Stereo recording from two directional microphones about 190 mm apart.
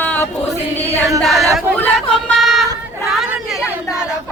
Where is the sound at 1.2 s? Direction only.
Centre (ahead or behind).